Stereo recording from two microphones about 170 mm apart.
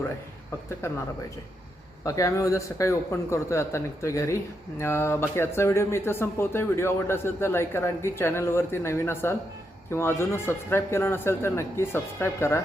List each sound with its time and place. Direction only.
0.5 s speech: 15° left (ahead or behind)
2.0 s speech: 20° left (ahead or behind)